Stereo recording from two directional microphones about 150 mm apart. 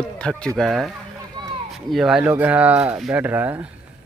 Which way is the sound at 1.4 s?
30° right (ahead or behind).